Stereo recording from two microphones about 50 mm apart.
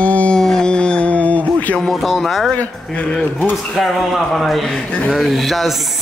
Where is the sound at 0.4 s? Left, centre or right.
Centre; by 1.8 s left.